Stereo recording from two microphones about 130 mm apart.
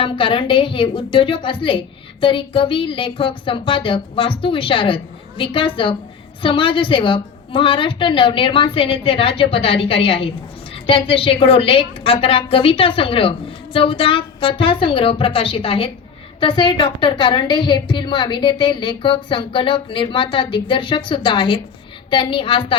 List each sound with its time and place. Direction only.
0.0 s a woman's voice: 40° left (ahead or behind)